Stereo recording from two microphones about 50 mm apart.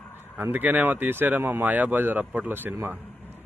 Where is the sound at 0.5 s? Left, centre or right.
Right.